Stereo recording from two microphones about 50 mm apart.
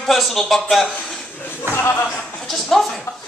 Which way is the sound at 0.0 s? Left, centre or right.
Centre.